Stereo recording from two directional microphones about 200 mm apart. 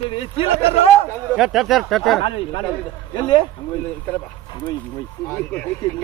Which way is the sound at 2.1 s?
25° left (ahead or behind).